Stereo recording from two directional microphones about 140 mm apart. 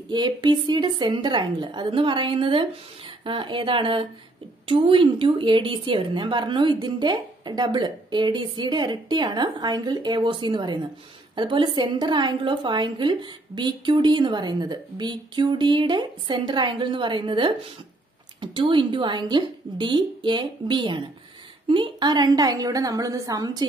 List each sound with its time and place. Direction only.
0.1 s a woman's voice: 35° right (ahead or behind)